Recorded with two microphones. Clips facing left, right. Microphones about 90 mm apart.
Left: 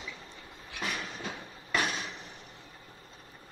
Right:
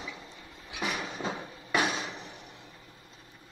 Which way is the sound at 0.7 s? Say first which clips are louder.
Right 3 dB; 15° right (ahead or behind).